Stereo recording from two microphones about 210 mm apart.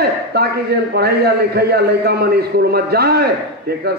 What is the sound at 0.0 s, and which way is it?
A man's voice, 50° right (ahead or behind).